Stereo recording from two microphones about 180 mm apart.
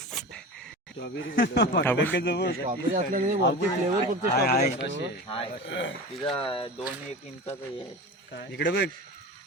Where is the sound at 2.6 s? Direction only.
45° right (ahead or behind).